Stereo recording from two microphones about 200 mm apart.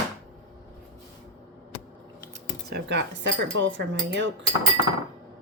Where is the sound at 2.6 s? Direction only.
60° right (ahead or behind).